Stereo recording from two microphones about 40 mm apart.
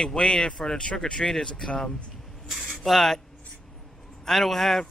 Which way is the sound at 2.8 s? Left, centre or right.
Centre.